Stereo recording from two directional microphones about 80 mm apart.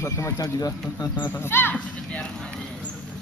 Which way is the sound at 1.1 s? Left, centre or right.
Left.